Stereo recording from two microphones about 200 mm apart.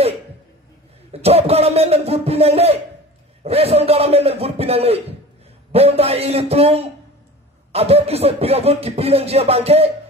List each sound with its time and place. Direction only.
1.1 s beatboxing: 30° right (ahead or behind)